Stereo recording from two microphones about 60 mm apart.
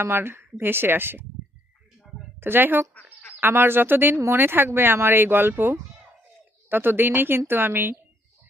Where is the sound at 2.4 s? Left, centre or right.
Right.